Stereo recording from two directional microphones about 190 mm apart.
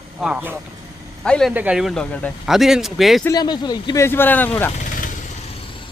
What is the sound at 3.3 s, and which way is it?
Speech, 20° left (ahead or behind).